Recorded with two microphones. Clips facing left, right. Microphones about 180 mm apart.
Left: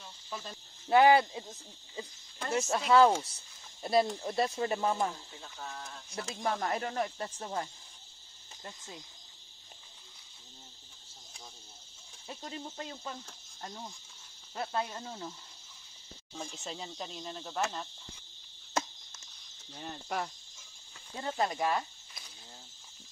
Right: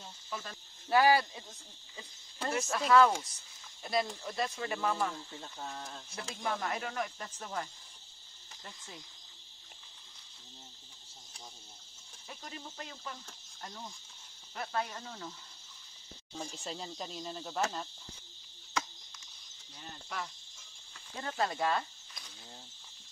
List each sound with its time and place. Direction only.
0.3 s speech: 20° left (ahead or behind)
2.5 s speech: 25° left (ahead or behind)
6.4 s speech: 35° left (ahead or behind)
8.6 s speech: 20° left (ahead or behind)
12.3 s speech: 25° left (ahead or behind)
13.6 s cricket: 25° left (ahead or behind)
14.5 s speech: 25° left (ahead or behind)
16.3 s speech: centre (ahead or behind)
18.7 s a sound: 45° left (ahead or behind)
19.7 s cricket: 55° left (ahead or behind)
21.2 s speech: 20° left (ahead or behind)